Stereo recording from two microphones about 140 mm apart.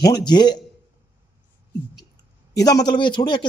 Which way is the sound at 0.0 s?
30° left (ahead or behind).